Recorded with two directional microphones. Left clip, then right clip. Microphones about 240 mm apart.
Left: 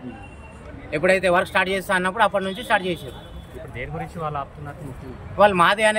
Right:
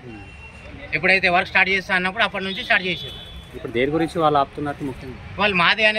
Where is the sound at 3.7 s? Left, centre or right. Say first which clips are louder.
Right 12 dB; right.